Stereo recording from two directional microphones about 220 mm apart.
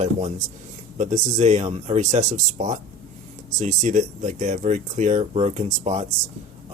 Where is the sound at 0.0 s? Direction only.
30° right (ahead or behind).